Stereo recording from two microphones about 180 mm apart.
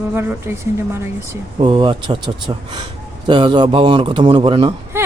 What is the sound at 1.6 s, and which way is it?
A man's voice, 30° right (ahead or behind).